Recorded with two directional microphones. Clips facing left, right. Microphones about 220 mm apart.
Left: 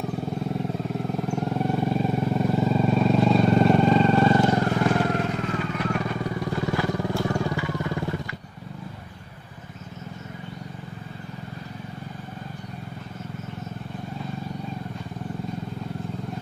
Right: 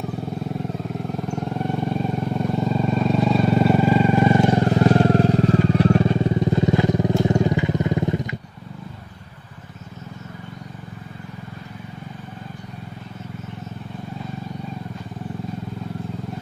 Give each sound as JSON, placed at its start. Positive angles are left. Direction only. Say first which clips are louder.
{"t": 0.9, "sound": "vehicle", "louder": "left 1 dB", "side_deg": 0}